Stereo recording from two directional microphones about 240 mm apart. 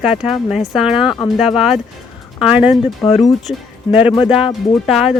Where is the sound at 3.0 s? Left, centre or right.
Left.